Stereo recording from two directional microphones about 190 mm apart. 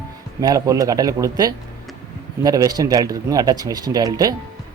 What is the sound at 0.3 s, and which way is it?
Speech, 20° right (ahead or behind).